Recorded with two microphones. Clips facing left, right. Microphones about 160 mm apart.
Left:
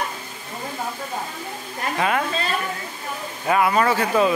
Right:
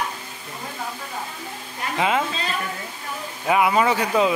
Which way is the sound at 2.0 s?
20° right (ahead or behind).